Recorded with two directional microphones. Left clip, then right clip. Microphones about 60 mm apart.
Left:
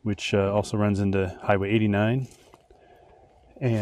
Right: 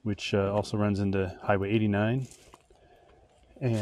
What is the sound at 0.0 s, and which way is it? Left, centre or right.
Speech, left.